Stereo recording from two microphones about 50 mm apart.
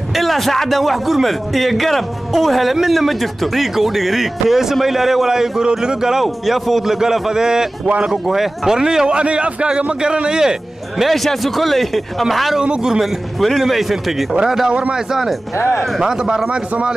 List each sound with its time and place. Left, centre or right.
0.1 s a man's voice: centre
6.2 s a man's voice: centre
11.1 s a man's voice: centre
12.5 s a man's voice: centre
13.0 s a man's voice: centre
14.7 s a man's voice: right
15.0 s a man's voice: centre
15.5 s speech: left
16.0 s a man's voice: centre